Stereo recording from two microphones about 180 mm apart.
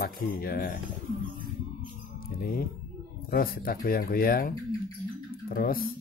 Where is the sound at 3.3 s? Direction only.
55° left (ahead or behind).